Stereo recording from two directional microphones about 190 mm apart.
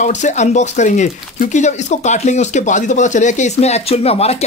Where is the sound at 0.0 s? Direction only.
40° left (ahead or behind).